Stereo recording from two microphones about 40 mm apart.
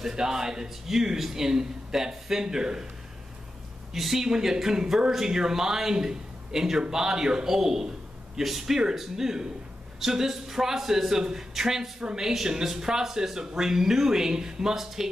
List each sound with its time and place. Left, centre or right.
0.1 s speech: centre
3.9 s speech: centre
12.0 s a woman's voice: right